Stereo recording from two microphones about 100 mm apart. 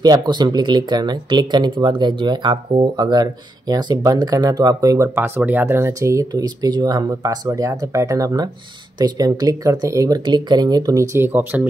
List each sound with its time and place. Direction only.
0.0 s speech: 45° right (ahead or behind)
11.1 s speech: 20° right (ahead or behind)